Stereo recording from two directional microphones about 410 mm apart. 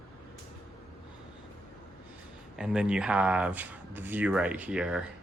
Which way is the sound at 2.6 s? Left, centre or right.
Centre.